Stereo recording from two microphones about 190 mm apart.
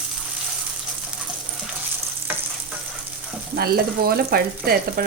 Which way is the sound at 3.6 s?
55° right (ahead or behind).